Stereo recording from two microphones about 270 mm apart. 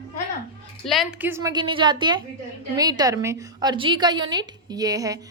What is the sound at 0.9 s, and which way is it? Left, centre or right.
A woman's voice, centre.